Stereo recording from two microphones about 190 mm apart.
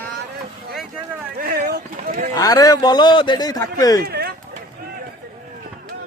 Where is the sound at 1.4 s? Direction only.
50° right (ahead or behind).